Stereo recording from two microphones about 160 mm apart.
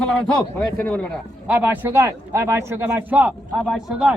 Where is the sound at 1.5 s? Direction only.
10° right (ahead or behind).